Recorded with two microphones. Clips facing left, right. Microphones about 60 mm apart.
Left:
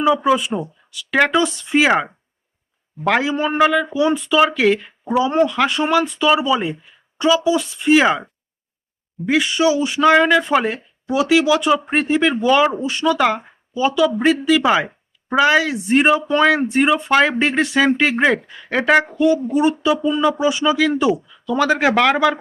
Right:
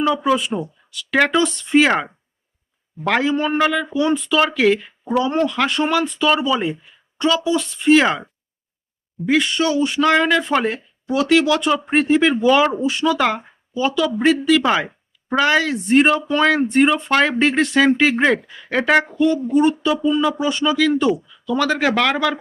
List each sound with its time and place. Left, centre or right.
0.3 s speech: centre
20.0 s speech: centre